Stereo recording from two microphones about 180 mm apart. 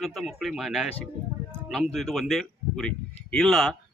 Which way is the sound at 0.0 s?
Centre (ahead or behind).